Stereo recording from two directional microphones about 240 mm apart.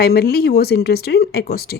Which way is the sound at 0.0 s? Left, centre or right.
Left.